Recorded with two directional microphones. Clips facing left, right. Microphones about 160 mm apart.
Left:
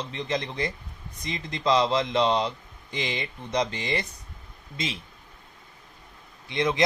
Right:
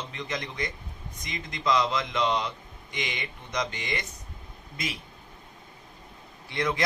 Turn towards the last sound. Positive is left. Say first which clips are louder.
# left 3 dB
turn(degrees=20)  # may be behind; listen again after turning